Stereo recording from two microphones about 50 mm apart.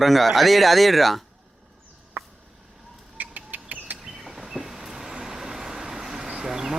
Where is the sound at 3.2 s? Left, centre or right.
Right.